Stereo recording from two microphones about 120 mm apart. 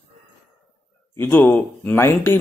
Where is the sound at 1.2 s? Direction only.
15° left (ahead or behind).